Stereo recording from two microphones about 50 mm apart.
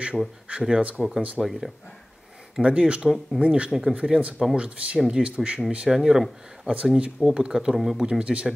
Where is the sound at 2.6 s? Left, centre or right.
Right.